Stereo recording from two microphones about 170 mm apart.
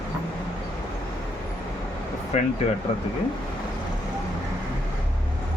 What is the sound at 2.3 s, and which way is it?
Speech, 35° left (ahead or behind).